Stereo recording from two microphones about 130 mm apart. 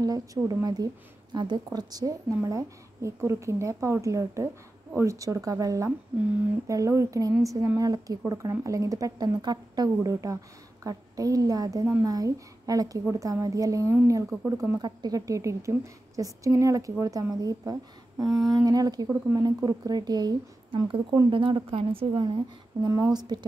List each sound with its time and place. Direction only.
0.0 s a woman's voice: 30° right (ahead or behind)
14.8 s a woman's voice: 35° right (ahead or behind)
19.0 s a woman's voice: 20° right (ahead or behind)
19.4 s a woman's voice: 30° right (ahead or behind)
22.8 s a woman's voice: 25° right (ahead or behind)